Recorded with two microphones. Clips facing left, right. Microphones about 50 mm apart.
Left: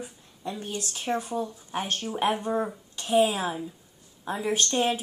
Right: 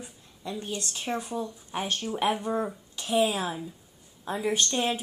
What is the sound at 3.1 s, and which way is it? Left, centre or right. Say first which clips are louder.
Speech: left 3 dB; left.